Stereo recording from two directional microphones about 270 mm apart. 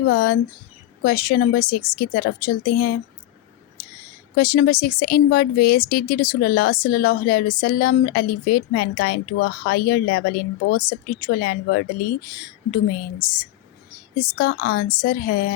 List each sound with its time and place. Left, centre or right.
0.1 s speech: left
4.4 s speech: left